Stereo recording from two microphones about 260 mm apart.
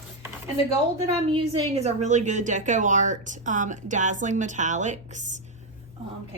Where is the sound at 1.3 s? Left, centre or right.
Right.